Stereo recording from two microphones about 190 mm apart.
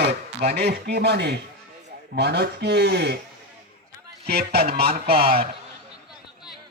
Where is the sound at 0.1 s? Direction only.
35° right (ahead or behind).